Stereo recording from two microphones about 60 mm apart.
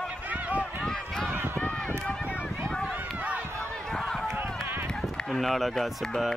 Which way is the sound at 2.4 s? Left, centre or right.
Centre.